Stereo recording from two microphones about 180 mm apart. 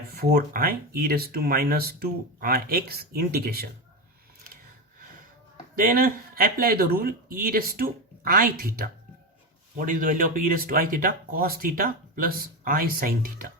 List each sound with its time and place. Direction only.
0.1 s speech: 60° right (ahead or behind)
5.7 s speech: 50° right (ahead or behind)